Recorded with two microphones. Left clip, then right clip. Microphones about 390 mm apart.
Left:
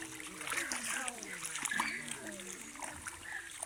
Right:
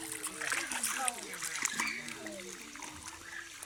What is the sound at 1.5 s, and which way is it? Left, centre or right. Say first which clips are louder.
Splash: right 1 dB; centre.